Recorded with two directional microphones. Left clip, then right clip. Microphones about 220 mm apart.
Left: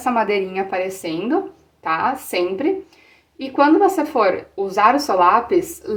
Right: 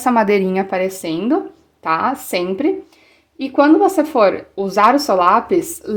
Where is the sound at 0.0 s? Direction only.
40° right (ahead or behind).